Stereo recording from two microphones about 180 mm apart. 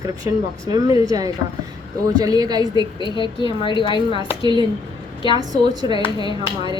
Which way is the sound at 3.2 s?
25° left (ahead or behind).